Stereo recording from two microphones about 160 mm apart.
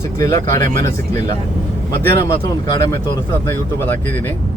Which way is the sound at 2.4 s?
25° left (ahead or behind).